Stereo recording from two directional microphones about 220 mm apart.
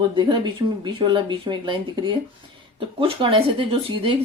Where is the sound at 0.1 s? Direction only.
20° right (ahead or behind).